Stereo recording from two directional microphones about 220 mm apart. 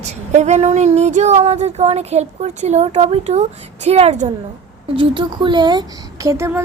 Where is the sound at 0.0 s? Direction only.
30° right (ahead or behind).